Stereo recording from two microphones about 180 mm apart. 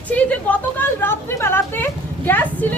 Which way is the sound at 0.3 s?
10° left (ahead or behind).